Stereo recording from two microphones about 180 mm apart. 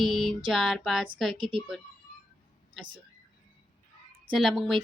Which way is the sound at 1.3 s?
25° right (ahead or behind).